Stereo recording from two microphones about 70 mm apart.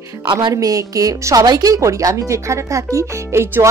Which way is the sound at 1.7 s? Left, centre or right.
Right.